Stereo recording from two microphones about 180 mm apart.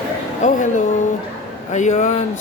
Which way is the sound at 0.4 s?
45° left (ahead or behind).